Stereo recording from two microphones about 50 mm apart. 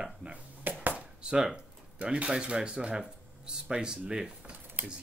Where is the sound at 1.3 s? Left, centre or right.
Centre.